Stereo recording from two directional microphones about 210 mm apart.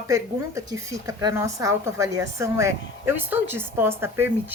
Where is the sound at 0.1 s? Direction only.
15° right (ahead or behind).